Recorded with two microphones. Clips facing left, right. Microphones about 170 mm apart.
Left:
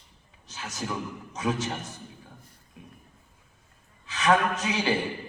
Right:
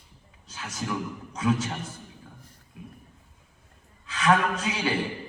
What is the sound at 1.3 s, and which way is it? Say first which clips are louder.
Speech: right 3 dB; 20° left (ahead or behind).